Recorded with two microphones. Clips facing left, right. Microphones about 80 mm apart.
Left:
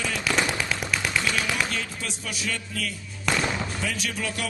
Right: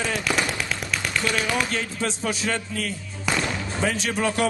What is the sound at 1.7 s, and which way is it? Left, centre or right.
Speech, right.